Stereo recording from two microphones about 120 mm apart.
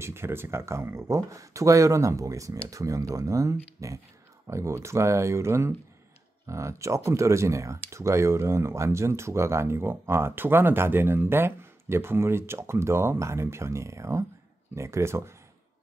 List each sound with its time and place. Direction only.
0.0 s speech: 20° right (ahead or behind)